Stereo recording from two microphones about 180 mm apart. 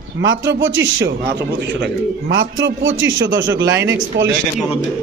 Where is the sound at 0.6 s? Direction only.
90° right; by 1.9 s 70° right (ahead or behind).